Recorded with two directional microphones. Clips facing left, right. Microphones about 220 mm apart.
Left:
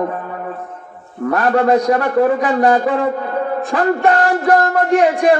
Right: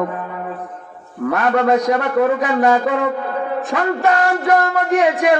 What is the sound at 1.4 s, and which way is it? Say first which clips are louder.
Music: left 2 dB; 30° left (ahead or behind).